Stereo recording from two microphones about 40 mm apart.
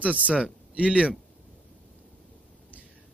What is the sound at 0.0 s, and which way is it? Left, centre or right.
Speech, right.